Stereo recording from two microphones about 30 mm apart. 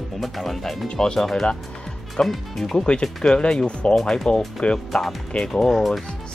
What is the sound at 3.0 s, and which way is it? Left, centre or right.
Speech, left.